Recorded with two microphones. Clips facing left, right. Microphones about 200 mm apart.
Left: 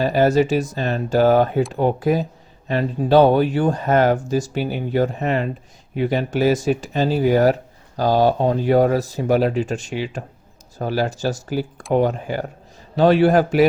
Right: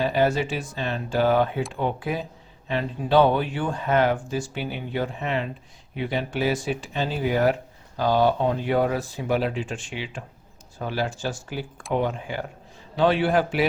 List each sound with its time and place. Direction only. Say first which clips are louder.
0.0 s speech: left 6 dB; 40° left (ahead or behind)